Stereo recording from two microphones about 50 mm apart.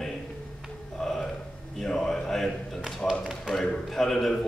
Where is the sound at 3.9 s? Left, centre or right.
Centre.